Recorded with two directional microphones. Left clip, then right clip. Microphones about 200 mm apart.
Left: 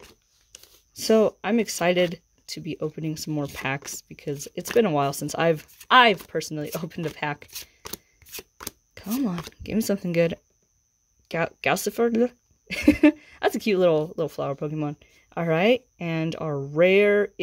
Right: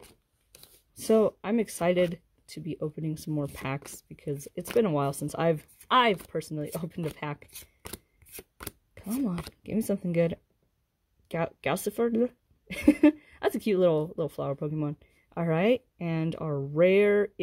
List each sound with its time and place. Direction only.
0.0 s a sound: 20° right (ahead or behind)
0.9 s speech: centre (ahead or behind)
8.2 s shuffling cards: centre (ahead or behind)
8.9 s speech: 5° left (ahead or behind)